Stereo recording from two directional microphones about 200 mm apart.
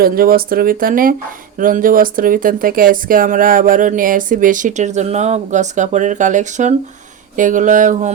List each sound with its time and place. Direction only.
0.0 s speech: 45° right (ahead or behind)